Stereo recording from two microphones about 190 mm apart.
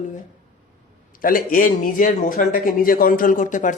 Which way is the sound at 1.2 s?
50° left (ahead or behind).